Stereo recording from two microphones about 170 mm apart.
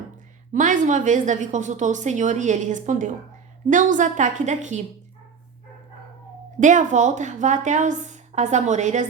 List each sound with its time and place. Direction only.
0.5 s a woman's voice: 50° right (ahead or behind)
6.6 s a woman's voice: 45° right (ahead or behind)